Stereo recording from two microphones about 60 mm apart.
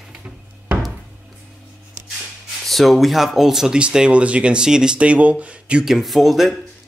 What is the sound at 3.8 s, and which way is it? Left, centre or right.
Speech, centre.